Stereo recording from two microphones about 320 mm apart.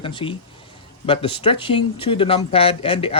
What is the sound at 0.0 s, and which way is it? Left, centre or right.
Speech, centre.